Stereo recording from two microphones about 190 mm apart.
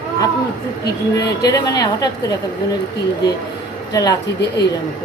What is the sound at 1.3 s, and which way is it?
Speech, 20° left (ahead or behind).